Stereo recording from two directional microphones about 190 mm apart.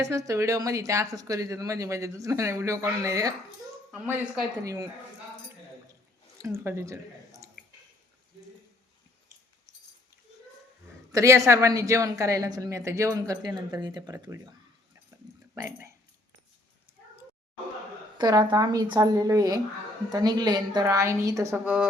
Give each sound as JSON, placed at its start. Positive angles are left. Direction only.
{"t": 0.0, "sound": "a woman's voice", "side_deg": -15}
{"t": 4.6, "sound": "a woman's voice", "side_deg": -15}
{"t": 6.4, "sound": "speech", "side_deg": -15}
{"t": 11.1, "sound": "a woman's voice", "side_deg": -15}
{"t": 15.2, "sound": "a sound", "side_deg": -20}
{"t": 18.2, "sound": "a woman's voice", "side_deg": -20}